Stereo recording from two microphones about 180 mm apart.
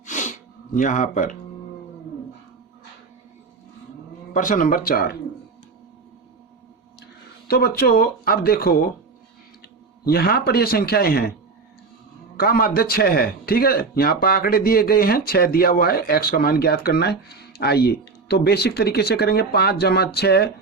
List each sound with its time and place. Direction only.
0.0 s sneeze: 45° left (ahead or behind)
4.4 s speech: 45° left (ahead or behind)
7.4 s a man's voice: 60° left (ahead or behind)
10.1 s a man's voice: 60° left (ahead or behind)
12.4 s a man's voice: 55° left (ahead or behind)